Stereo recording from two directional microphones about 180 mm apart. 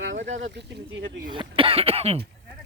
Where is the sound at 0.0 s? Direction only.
90° right.